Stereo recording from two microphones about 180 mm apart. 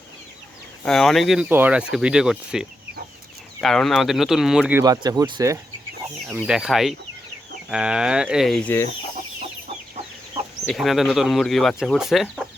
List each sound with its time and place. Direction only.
0.9 s speech: centre (ahead or behind)
4.8 s speech: 20° right (ahead or behind)
6.4 s speech: centre (ahead or behind)
10.7 s speech: centre (ahead or behind)